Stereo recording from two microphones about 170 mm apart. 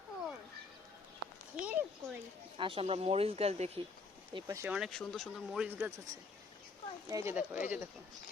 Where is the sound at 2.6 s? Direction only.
30° right (ahead or behind).